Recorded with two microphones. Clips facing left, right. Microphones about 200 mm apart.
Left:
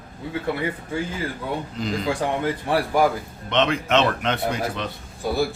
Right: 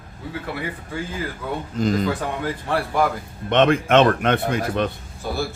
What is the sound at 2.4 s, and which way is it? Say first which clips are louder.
Speech: left 2 dB; 10° left (ahead or behind).